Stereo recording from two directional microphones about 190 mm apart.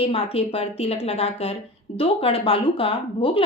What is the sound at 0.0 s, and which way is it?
A woman's voice, 30° left (ahead or behind).